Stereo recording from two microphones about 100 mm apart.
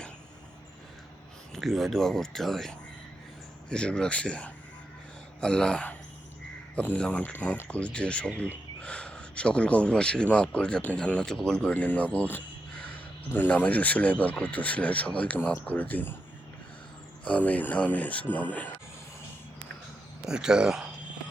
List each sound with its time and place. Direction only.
1.5 s speech: centre (ahead or behind); by 16.1 s 20° left (ahead or behind)
17.2 s speech: 15° left (ahead or behind)
20.2 s speech: 5° right (ahead or behind)